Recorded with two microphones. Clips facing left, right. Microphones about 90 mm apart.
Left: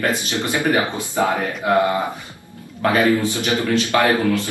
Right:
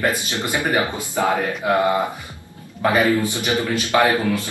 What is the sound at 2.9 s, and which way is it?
A man's voice, 15° right (ahead or behind).